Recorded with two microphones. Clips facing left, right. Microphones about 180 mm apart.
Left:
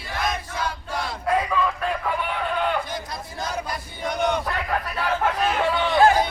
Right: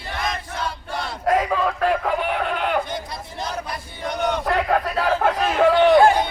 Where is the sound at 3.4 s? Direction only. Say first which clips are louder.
Even; 5° left (ahead or behind).